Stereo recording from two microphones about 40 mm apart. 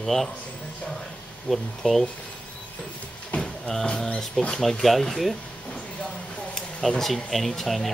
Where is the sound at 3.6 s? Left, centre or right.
Centre.